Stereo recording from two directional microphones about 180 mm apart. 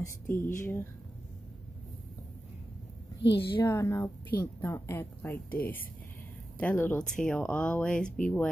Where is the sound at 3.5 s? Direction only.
20° left (ahead or behind).